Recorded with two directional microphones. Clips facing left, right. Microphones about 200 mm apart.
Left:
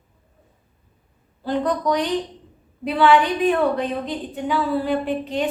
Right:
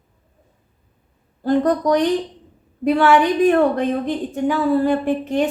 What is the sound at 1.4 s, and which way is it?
A woman's voice, 45° right (ahead or behind).